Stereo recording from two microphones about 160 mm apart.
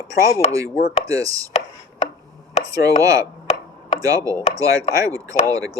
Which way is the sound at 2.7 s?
20° right (ahead or behind).